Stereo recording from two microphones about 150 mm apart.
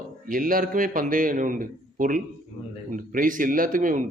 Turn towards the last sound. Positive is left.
turn(degrees=-60)  # may be behind; listen again after turning